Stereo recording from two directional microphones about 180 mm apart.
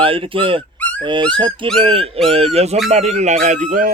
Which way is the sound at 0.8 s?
10° left (ahead or behind).